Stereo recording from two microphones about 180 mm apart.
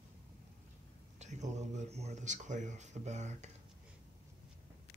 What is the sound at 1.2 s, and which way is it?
Speech, 40° right (ahead or behind).